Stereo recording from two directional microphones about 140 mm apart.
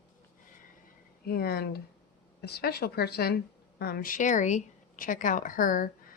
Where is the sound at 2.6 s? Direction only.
90° left.